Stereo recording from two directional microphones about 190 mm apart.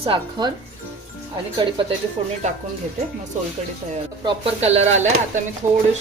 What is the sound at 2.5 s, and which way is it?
Speech, 40° right (ahead or behind).